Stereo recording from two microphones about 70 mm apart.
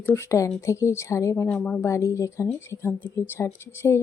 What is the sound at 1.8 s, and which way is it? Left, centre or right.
A woman's voice, left.